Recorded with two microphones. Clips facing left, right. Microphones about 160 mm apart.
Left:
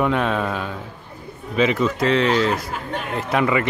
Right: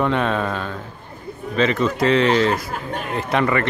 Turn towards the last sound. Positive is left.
turn(degrees=5)  # may be behind; listen again after turning